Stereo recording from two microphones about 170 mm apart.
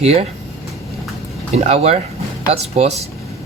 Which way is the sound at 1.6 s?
40° right (ahead or behind).